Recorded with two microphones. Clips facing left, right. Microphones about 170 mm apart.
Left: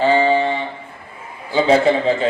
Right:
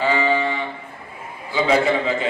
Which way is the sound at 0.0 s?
30° left (ahead or behind).